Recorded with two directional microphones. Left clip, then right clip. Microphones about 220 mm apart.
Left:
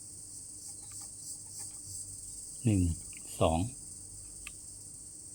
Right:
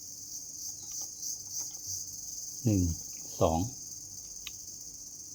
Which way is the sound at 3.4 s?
30° left (ahead or behind).